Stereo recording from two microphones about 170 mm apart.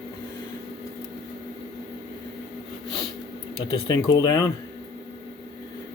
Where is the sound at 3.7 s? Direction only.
30° left (ahead or behind).